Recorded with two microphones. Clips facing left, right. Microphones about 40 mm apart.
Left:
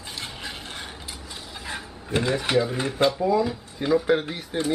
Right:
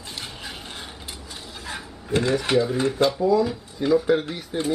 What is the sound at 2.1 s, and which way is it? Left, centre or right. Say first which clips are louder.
Speech: right 2 dB; centre.